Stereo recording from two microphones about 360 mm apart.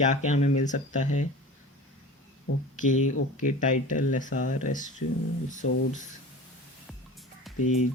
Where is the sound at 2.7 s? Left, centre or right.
Left.